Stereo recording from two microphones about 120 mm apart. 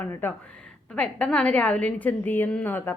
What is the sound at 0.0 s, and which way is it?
Speech, 15° left (ahead or behind).